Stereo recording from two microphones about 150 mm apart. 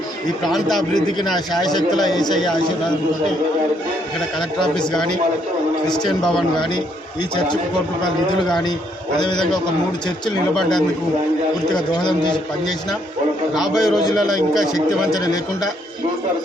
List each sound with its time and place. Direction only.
0.4 s a man's voice: centre (ahead or behind)
2.0 s speech: 25° left (ahead or behind)
5.9 s a man's voice: 5° left (ahead or behind)
7.3 s a man's voice: 30° left (ahead or behind)
10.5 s a man's voice: centre (ahead or behind)
11.7 s a man's voice: 30° left (ahead or behind)
13.5 s a man's voice: centre (ahead or behind)
14.7 s speech: 25° left (ahead or behind)